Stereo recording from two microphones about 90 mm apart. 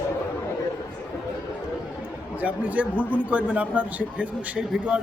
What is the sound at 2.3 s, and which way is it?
A man's voice, 15° right (ahead or behind).